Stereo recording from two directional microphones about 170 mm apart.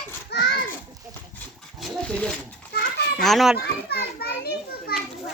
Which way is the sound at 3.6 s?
70° left (ahead or behind).